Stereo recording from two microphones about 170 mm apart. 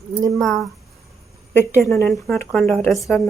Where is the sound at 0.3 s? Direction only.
Centre (ahead or behind).